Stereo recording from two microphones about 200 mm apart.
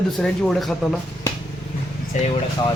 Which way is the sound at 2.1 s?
40° left (ahead or behind).